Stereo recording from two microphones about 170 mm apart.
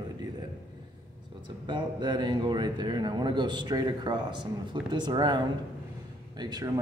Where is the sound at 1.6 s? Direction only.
25° right (ahead or behind).